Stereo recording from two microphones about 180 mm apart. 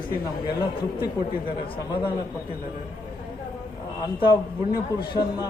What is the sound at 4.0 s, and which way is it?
Speech, 25° left (ahead or behind).